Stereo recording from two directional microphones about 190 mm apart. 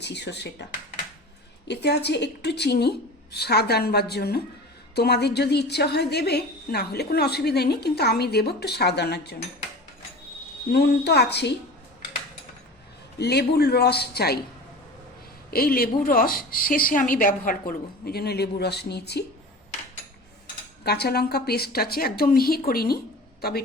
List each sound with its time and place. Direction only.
0.0 s a woman's voice: 65° left (ahead or behind)
10.7 s a woman's voice: 60° left (ahead or behind)
13.1 s a woman's voice: 60° left (ahead or behind)
15.4 s a woman's voice: 50° left (ahead or behind)
20.8 s a woman's voice: 55° left (ahead or behind)